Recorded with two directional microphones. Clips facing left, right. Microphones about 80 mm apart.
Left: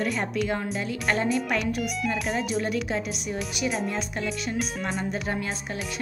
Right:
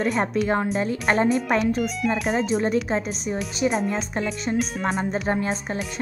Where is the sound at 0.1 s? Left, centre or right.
Right.